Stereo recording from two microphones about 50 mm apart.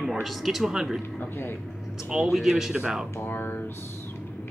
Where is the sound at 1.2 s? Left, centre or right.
Left.